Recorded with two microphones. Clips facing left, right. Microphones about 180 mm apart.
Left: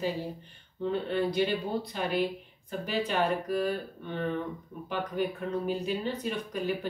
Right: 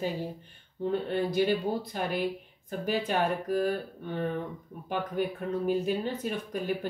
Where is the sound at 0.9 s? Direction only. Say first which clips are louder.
Even; 50° right (ahead or behind).